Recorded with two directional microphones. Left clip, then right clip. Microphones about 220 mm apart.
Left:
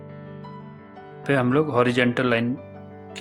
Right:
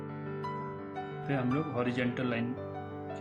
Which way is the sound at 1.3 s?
45° right (ahead or behind).